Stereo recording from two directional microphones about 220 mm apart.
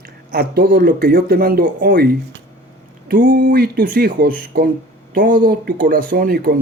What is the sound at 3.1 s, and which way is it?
Speech, 40° right (ahead or behind).